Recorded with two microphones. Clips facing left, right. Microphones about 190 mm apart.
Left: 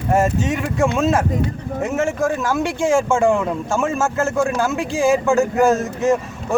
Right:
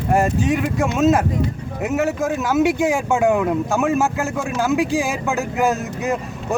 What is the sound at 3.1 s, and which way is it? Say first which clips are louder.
Speech: even; 5° right (ahead or behind).